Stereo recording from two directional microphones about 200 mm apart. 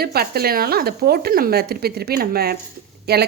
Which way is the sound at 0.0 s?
50° right (ahead or behind).